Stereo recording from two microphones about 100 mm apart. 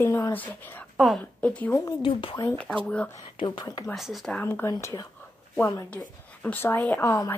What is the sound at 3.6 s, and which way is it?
Speech, 40° left (ahead or behind).